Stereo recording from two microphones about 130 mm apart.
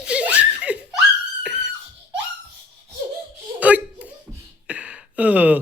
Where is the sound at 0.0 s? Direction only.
10° right (ahead or behind).